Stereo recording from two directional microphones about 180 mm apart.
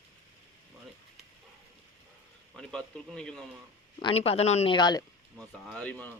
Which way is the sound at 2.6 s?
5° left (ahead or behind).